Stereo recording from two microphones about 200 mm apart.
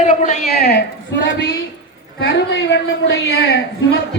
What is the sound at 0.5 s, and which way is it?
A woman's voice, 55° left (ahead or behind).